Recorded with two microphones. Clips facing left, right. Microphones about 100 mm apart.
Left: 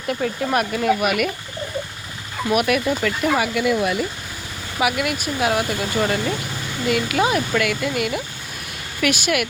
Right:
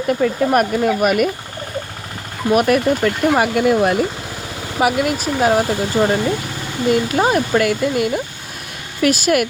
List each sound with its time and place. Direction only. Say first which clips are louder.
0.1 s speech: right 5 dB; 50° right (ahead or behind)
2.5 s speech: right 5 dB; 35° right (ahead or behind)